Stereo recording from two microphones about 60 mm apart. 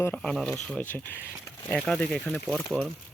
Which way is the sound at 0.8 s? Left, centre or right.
Left.